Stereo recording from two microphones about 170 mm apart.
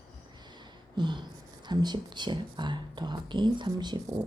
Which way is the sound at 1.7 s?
25° right (ahead or behind).